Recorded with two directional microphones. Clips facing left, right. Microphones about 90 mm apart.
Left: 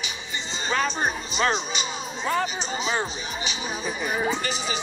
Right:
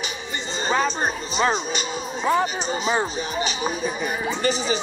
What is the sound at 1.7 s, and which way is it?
Music, 45° right (ahead or behind).